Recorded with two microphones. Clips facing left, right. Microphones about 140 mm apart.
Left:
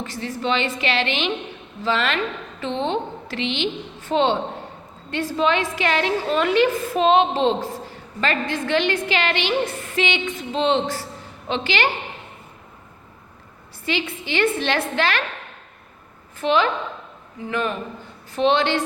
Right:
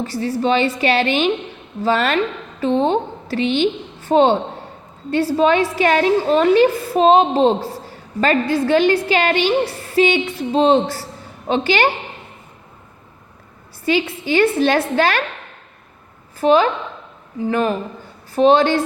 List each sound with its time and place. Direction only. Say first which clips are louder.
0.0 s a woman's voice: right 7 dB; 35° right (ahead or behind)
13.8 s a woman's voice: right 7 dB; 40° right (ahead or behind)
16.4 s a woman's voice: right 5 dB; 40° right (ahead or behind)